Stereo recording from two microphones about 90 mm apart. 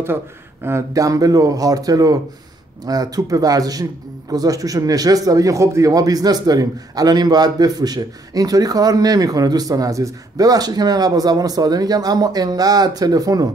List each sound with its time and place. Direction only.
0.7 s speech: 35° right (ahead or behind)